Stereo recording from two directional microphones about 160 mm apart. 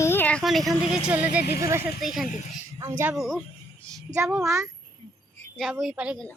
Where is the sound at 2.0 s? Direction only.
Centre (ahead or behind).